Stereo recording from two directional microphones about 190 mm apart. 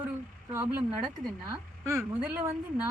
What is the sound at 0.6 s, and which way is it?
Speech, 10° right (ahead or behind).